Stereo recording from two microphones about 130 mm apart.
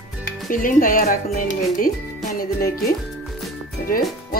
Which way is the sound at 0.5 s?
90° left.